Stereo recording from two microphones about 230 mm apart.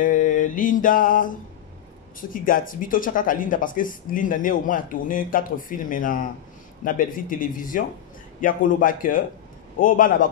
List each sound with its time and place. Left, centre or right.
0.0 s mantra: left
2.1 s speech: left